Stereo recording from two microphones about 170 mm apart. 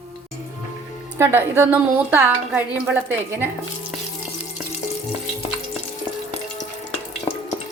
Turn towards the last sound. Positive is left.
turn(degrees=25)  # may be behind; listen again after turning